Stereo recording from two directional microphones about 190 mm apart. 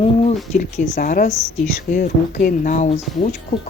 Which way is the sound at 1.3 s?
15° left (ahead or behind).